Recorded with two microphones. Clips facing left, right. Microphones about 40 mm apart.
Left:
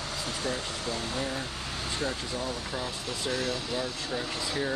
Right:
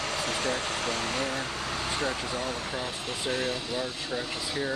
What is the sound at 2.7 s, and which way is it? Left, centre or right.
Speech, right.